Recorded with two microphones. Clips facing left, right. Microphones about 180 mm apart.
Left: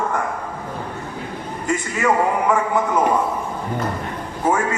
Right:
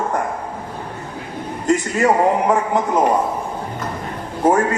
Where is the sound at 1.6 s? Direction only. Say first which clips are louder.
Right 4 dB; 35° right (ahead or behind).